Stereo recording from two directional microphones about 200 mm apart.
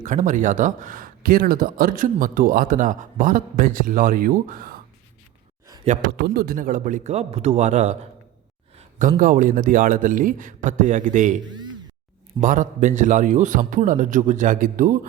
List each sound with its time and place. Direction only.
0.0 s speech: 40° right (ahead or behind)
6.2 s a man's voice: 50° right (ahead or behind); by 7.9 s 35° right (ahead or behind)
9.0 s a man's voice: 45° right (ahead or behind)
12.4 s a man's voice: 40° right (ahead or behind)